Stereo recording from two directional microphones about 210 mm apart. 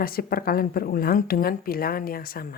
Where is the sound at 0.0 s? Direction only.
45° left (ahead or behind).